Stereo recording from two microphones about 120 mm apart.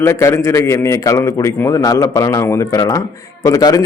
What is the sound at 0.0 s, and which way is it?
Speech, 20° left (ahead or behind).